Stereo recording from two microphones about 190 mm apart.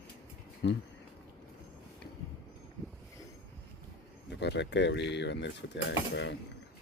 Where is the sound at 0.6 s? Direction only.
65° left (ahead or behind).